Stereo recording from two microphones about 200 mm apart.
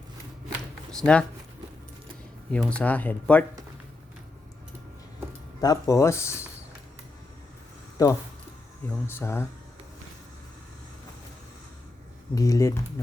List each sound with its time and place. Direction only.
0.9 s speech: 5° left (ahead or behind)
2.5 s speech: 5° left (ahead or behind)
5.5 s speech: 20° left (ahead or behind)
8.0 s speech: 20° left (ahead or behind)
12.3 s speech: 15° left (ahead or behind)